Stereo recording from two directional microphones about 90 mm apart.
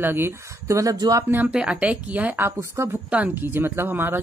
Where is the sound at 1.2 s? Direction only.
25° right (ahead or behind).